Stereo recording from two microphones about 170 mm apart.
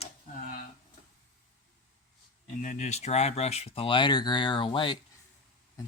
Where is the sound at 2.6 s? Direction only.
45° left (ahead or behind).